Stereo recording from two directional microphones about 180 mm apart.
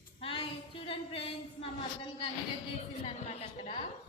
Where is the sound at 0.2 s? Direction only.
30° left (ahead or behind).